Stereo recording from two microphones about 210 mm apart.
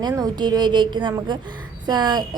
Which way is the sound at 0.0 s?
20° right (ahead or behind).